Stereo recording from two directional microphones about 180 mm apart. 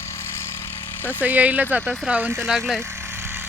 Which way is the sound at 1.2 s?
10° right (ahead or behind).